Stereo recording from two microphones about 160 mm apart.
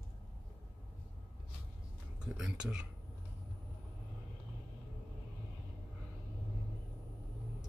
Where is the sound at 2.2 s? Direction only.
5° right (ahead or behind).